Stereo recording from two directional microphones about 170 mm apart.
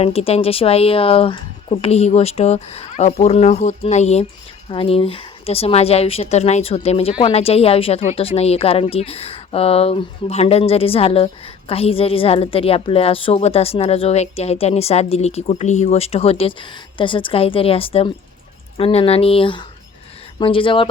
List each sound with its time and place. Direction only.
0.0 s a woman's voice: 35° left (ahead or behind)